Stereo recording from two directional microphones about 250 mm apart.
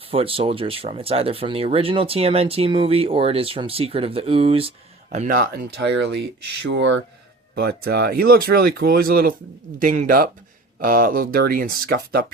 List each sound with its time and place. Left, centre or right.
0.1 s speech: right
5.1 s speech: right
6.4 s speech: right
6.7 s speech: right